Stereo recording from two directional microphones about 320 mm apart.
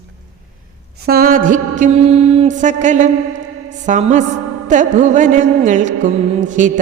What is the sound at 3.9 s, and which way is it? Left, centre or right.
Music, right.